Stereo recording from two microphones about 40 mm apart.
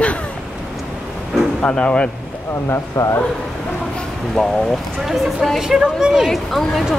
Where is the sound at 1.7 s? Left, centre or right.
Left.